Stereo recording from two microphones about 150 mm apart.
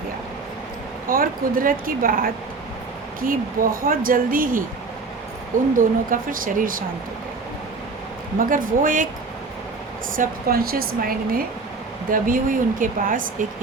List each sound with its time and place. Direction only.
1.1 s speech: 70° right (ahead or behind)
5.7 s speech: 65° right (ahead or behind)
8.4 s speech: 65° right (ahead or behind)
10.2 s speech: 80° right
12.1 s speech: 65° right (ahead or behind)